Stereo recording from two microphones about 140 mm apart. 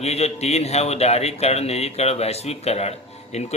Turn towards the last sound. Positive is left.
turn(degrees=50)  # may be behind; listen again after turning